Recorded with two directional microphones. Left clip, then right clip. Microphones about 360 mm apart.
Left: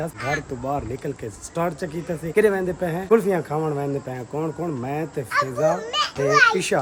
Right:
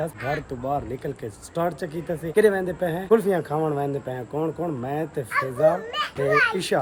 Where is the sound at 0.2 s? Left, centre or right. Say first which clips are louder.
Left 2 dB; centre.